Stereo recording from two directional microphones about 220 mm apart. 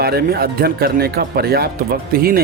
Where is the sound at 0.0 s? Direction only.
45° right (ahead or behind).